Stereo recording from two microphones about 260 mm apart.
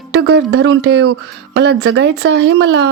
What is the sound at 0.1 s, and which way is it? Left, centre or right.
Speech, right.